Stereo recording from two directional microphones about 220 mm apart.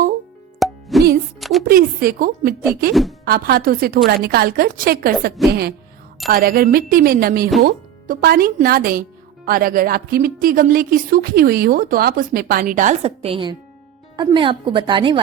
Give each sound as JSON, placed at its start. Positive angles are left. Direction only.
{"t": 0.6, "sound": "music", "side_deg": 0}
{"t": 1.4, "sound": "a sound", "side_deg": 0}
{"t": 1.6, "sound": "a woman's voice", "side_deg": -40}
{"t": 2.9, "sound": "speech", "side_deg": 0}
{"t": 3.2, "sound": "a woman's voice", "side_deg": -40}
{"t": 6.3, "sound": "a woman's voice", "side_deg": -40}